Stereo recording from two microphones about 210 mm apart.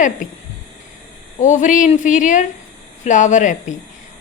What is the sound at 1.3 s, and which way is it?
A woman's voice, 35° left (ahead or behind).